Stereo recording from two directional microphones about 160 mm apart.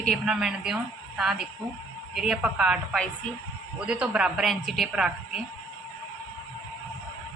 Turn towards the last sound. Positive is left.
turn(degrees=-5)  # may be behind; listen again after turning